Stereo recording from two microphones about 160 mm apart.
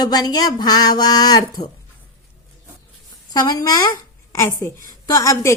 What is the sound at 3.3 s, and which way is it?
Speech, 25° left (ahead or behind).